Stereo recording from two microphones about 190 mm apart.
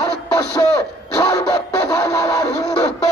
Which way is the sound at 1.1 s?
15° left (ahead or behind).